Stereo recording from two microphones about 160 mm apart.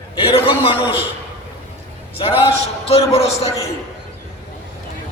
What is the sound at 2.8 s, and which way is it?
Speech, 40° left (ahead or behind).